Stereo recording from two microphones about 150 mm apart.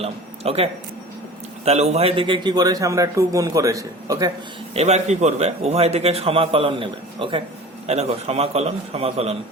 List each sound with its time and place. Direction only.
0.0 s a man's voice: 40° right (ahead or behind); by 4.3 s 20° right (ahead or behind)
4.7 s a man's voice: 45° right (ahead or behind)
7.9 s a man's voice: 45° right (ahead or behind)